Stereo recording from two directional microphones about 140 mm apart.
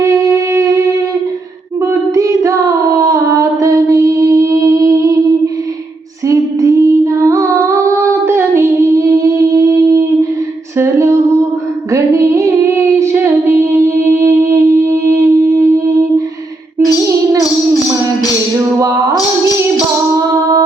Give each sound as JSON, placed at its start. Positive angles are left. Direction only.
{"t": 0.0, "sound": "music", "side_deg": -20}
{"t": 1.8, "sound": "child singing", "side_deg": -20}
{"t": 6.2, "sound": "female singing", "side_deg": -20}
{"t": 10.8, "sound": "humming", "side_deg": -20}
{"t": 11.9, "sound": "a sound", "side_deg": -20}
{"t": 20.1, "sound": "music", "side_deg": -25}